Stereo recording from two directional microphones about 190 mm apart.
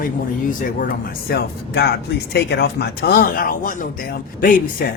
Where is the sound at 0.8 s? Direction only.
50° left (ahead or behind).